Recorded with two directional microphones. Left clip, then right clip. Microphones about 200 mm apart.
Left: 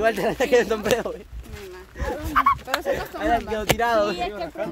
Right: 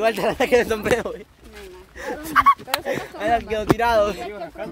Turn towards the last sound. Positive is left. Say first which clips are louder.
# left 3 dB
turn(degrees=40)  # may be behind; listen again after turning